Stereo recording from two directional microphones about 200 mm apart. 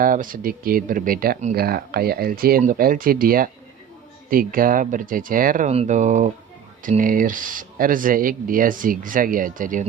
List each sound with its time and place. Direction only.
0.0 s speech: 45° right (ahead or behind)